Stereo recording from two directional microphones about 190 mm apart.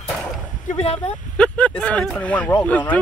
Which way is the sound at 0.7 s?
30° left (ahead or behind).